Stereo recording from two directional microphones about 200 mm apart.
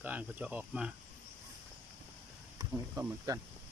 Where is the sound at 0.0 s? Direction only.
10° right (ahead or behind).